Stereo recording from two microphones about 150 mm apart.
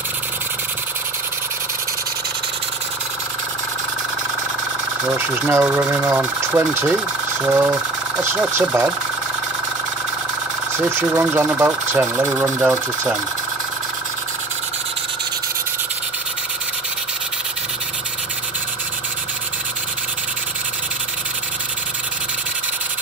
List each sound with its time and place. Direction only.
5.0 s speech: 5° right (ahead or behind)
11.0 s speech: 15° right (ahead or behind)